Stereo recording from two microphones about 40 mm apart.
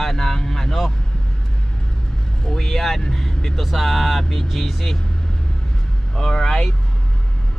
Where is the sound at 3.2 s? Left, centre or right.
Centre.